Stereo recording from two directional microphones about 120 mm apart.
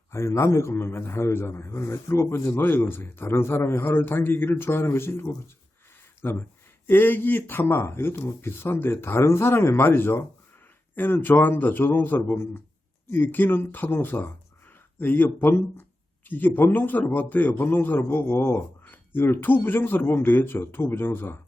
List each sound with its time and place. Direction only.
0.1 s a man's voice: 20° left (ahead or behind)